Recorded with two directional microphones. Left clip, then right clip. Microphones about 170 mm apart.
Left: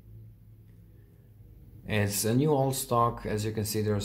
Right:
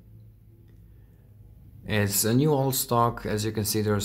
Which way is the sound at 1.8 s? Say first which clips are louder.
Right 3 dB; 20° right (ahead or behind).